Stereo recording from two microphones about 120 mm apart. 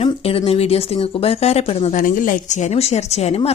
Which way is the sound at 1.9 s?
90° left.